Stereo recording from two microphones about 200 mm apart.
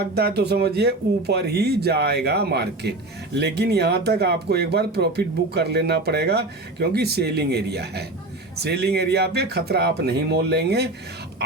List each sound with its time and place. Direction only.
0.1 s speech: 55° right (ahead or behind)